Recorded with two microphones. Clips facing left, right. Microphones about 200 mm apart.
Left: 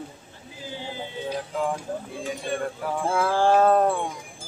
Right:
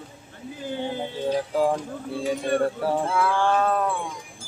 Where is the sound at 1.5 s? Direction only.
35° right (ahead or behind).